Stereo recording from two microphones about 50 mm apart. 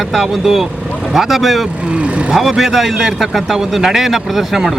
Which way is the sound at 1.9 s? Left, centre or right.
Right.